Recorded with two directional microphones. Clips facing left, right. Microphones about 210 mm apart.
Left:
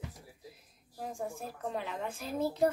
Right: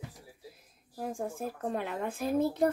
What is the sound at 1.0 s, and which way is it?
A woman's voice, 55° right (ahead or behind).